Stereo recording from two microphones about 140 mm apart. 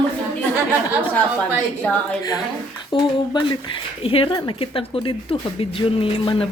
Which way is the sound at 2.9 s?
35° left (ahead or behind).